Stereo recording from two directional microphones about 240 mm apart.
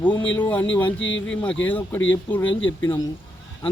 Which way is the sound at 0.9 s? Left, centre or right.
Left.